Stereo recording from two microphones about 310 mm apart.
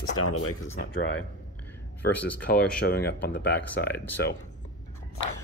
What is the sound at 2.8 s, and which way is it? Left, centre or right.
Speech, left.